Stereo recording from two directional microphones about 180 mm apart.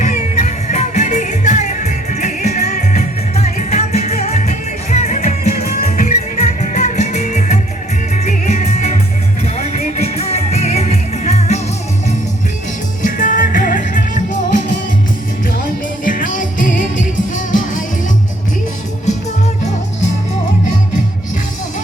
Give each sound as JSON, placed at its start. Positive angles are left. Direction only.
{"t": 0.0, "sound": "music", "side_deg": 40}
{"t": 13.0, "sound": "music", "side_deg": 45}
{"t": 16.0, "sound": "music", "side_deg": 45}